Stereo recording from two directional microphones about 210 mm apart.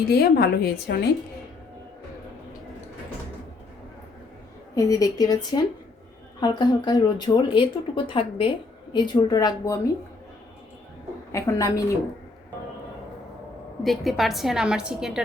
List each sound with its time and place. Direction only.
0.1 s a woman's voice: 50° left (ahead or behind)
4.7 s a woman's voice: 15° left (ahead or behind)
11.3 s a woman's voice: 15° left (ahead or behind)
13.8 s a woman's voice: centre (ahead or behind)